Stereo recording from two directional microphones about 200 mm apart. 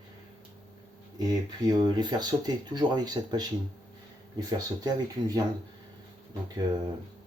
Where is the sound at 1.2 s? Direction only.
20° right (ahead or behind).